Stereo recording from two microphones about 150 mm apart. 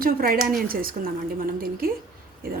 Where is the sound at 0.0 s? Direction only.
75° right (ahead or behind).